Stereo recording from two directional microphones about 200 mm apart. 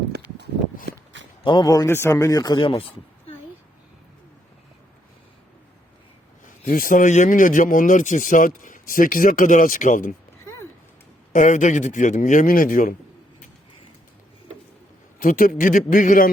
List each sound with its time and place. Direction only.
0.9 s a sound: 65° right (ahead or behind)
1.5 s speech: 20° left (ahead or behind)
6.4 s speech: 40° left (ahead or behind)
10.4 s a sound: 15° left (ahead or behind)
11.3 s speech: 40° left (ahead or behind)
15.2 s a man's voice: 40° left (ahead or behind)